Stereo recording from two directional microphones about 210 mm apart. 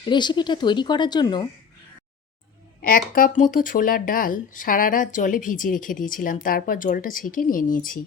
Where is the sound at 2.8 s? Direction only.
45° left (ahead or behind).